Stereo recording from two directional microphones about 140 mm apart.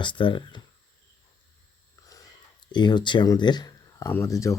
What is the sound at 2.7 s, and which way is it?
Speech, 30° left (ahead or behind).